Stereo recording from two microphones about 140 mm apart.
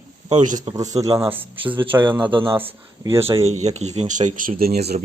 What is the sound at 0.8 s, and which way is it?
Speech, 25° right (ahead or behind).